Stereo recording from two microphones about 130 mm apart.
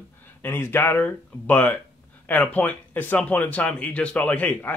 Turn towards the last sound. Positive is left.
turn(degrees=10)  # may be behind; listen again after turning